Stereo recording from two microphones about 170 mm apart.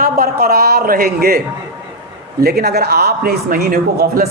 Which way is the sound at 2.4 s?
65° right (ahead or behind).